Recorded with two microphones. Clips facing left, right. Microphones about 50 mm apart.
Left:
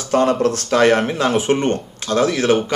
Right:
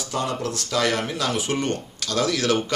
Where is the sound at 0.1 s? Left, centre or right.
Left.